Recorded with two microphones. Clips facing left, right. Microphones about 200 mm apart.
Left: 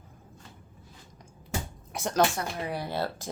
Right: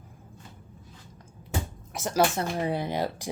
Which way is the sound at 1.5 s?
Centre (ahead or behind).